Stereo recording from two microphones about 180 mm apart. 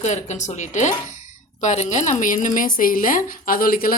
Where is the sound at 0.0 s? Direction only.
40° left (ahead or behind).